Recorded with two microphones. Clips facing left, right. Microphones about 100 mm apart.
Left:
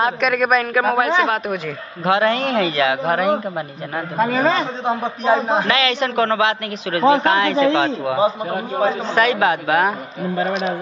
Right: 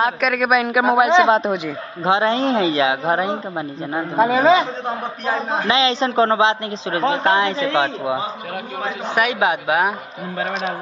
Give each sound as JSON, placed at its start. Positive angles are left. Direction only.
{"t": 0.0, "sound": "a man's voice", "side_deg": 0}
{"t": 4.4, "sound": "a man's voice", "side_deg": -10}
{"t": 5.7, "sound": "a man's voice", "side_deg": -30}